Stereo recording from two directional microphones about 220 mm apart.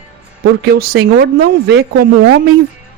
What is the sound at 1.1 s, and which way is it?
A woman's voice, 45° right (ahead or behind).